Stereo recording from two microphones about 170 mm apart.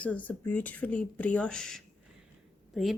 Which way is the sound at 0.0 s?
10° left (ahead or behind).